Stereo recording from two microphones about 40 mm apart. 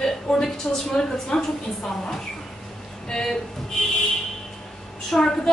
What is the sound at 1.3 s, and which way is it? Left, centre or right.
Speech, left.